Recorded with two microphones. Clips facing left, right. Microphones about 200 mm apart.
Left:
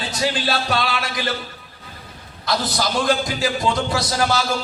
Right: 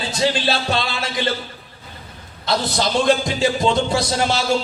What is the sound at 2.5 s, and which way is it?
A man's voice, 25° right (ahead or behind).